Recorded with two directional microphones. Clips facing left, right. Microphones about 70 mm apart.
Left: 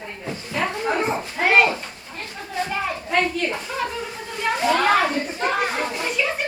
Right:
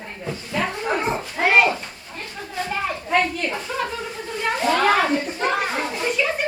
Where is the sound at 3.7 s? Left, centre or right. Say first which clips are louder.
Right 3 dB; centre.